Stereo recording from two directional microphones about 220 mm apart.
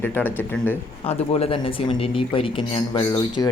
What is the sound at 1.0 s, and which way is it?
Speech, 25° left (ahead or behind).